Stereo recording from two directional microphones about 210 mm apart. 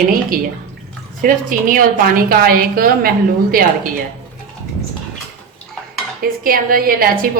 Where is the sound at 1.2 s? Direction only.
40° right (ahead or behind).